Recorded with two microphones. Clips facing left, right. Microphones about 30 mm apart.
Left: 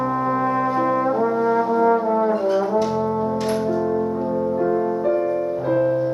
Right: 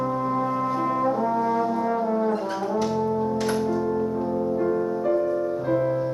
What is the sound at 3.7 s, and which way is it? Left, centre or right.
Music, centre.